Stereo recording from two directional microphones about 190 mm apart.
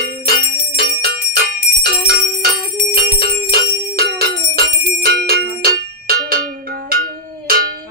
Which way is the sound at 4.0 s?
50° right (ahead or behind).